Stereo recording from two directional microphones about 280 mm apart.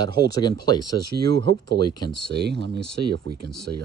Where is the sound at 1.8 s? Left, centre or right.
Centre.